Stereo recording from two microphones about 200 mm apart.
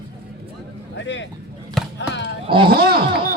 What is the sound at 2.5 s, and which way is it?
Speech, 25° right (ahead or behind).